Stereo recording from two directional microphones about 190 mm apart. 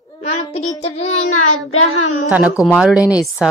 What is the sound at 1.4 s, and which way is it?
Speech, 90° left.